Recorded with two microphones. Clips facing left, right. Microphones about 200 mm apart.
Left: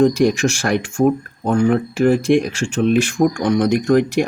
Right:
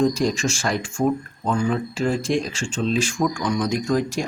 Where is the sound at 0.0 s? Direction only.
65° left (ahead or behind).